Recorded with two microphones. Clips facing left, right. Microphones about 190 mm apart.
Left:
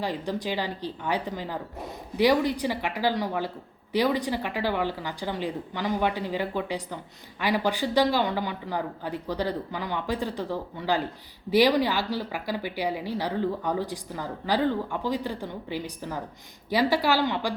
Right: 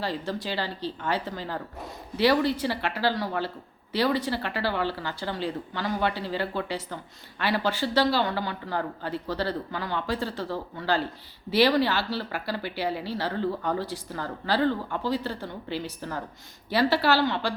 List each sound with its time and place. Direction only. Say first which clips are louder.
0.0 s speech: left 1 dB; 15° left (ahead or behind)